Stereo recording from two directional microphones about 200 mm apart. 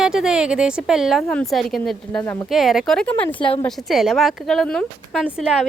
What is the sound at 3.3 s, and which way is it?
Speech, 25° left (ahead or behind).